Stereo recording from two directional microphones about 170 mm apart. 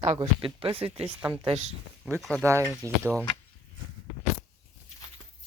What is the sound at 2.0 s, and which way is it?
Speech, 5° right (ahead or behind).